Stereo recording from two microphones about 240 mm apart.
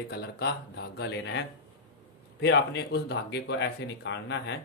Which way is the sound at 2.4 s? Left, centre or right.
Left.